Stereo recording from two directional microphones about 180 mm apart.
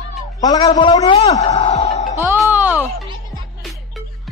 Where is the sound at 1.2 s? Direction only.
40° left (ahead or behind).